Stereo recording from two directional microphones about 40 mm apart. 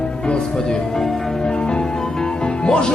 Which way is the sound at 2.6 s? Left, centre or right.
Left.